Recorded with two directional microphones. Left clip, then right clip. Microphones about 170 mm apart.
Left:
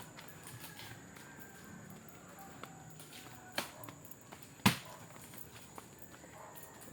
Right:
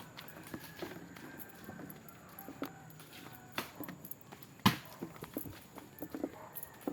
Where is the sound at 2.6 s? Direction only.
75° right (ahead or behind).